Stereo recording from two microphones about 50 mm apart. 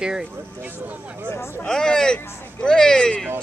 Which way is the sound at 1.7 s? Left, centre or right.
Centre.